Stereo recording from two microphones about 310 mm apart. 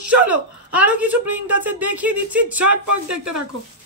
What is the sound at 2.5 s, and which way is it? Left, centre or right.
Speech, right.